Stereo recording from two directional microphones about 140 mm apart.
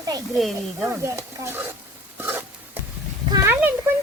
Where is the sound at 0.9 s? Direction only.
20° right (ahead or behind).